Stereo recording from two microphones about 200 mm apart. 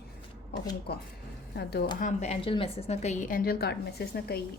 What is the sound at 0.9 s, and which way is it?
Speech, 50° left (ahead or behind).